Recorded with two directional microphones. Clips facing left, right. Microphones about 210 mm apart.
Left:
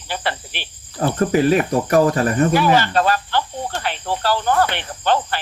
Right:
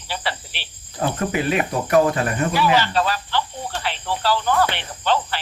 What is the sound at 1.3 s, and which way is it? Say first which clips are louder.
Cricket: left 8 dB; 40° left (ahead or behind).